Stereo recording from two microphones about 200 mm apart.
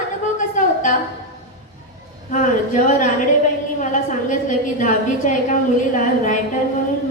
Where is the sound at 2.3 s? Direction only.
40° left (ahead or behind).